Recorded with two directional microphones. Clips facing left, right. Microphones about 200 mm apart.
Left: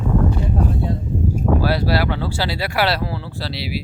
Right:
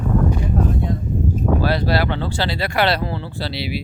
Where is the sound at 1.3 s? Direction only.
10° left (ahead or behind).